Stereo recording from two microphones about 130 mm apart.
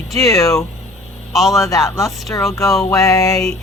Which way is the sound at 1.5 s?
25° left (ahead or behind).